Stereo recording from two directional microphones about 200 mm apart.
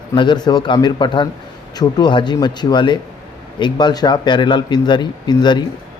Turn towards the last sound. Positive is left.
turn(degrees=20)  # may be behind; listen again after turning